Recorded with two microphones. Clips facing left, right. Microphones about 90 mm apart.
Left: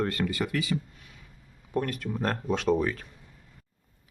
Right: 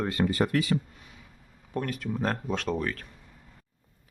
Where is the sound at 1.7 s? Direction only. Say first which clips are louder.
Left 1 dB; centre (ahead or behind).